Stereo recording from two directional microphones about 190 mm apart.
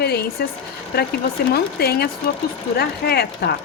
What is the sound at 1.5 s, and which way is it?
Speech, 50° left (ahead or behind).